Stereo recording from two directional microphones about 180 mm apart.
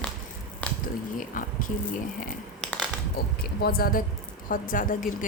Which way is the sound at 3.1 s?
60° left (ahead or behind).